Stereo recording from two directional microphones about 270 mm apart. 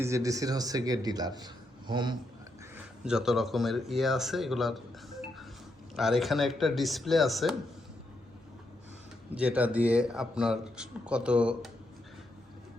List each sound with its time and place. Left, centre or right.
0.0 s speech: centre
3.0 s speech: centre
9.3 s speech: centre